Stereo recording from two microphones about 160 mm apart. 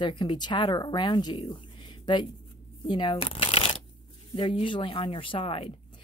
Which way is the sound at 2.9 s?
30° left (ahead or behind).